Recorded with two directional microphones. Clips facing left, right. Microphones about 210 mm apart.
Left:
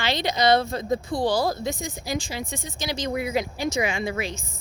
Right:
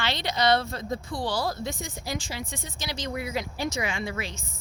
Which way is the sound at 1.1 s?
40° left (ahead or behind).